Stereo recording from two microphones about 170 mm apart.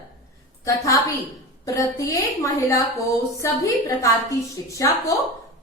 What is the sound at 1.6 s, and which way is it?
A woman's voice, 20° left (ahead or behind).